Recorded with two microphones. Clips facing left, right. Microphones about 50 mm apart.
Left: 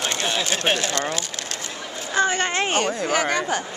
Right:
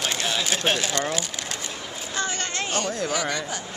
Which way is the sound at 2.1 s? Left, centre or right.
Left.